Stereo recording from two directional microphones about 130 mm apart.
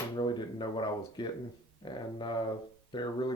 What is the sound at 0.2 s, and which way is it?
Speech, 35° left (ahead or behind).